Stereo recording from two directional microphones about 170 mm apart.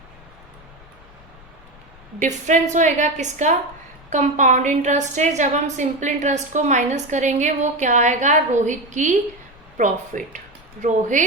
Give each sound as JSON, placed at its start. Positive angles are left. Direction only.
{"t": 2.1, "sound": "a woman's voice", "side_deg": -45}